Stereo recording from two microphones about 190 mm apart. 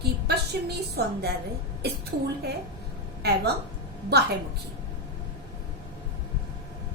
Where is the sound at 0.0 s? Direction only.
60° right (ahead or behind).